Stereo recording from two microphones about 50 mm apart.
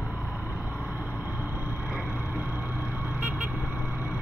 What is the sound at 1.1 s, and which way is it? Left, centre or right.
Vehicle, left.